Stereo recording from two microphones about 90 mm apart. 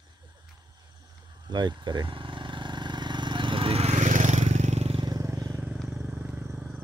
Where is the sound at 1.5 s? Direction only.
55° right (ahead or behind); by 3.8 s 75° right (ahead or behind).